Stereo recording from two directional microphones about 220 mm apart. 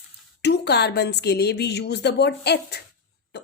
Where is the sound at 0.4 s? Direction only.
50° left (ahead or behind).